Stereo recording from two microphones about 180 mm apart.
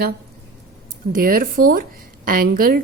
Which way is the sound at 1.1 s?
50° right (ahead or behind).